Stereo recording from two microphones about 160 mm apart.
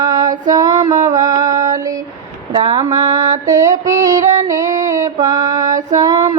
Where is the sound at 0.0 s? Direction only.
20° right (ahead or behind).